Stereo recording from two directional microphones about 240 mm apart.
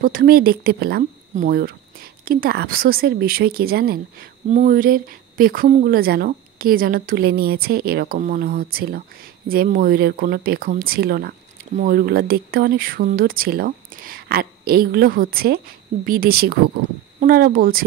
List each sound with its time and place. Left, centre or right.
0.0 s speech: right